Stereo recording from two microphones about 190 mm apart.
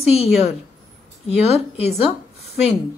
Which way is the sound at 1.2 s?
35° left (ahead or behind).